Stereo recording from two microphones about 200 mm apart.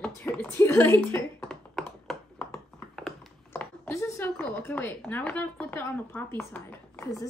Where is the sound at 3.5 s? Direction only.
10° left (ahead or behind).